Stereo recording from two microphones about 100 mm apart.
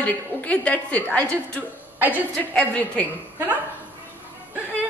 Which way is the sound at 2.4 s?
15° left (ahead or behind).